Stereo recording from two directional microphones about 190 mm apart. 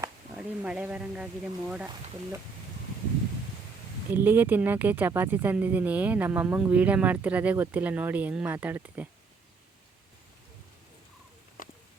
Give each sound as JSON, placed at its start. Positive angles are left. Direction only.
{"t": 0.3, "sound": "speech", "side_deg": -5}
{"t": 4.1, "sound": "speech", "side_deg": -10}
{"t": 11.6, "sound": "a sound", "side_deg": 45}